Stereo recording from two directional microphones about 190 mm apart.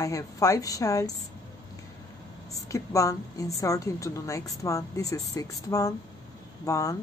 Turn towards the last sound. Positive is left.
turn(degrees=15)  # may be behind; listen again after turning